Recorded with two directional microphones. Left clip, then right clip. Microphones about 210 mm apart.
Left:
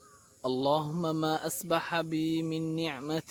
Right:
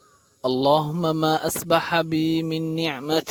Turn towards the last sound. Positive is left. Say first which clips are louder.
# right 10 dB
turn(degrees=-45)  # may be behind; listen again after turning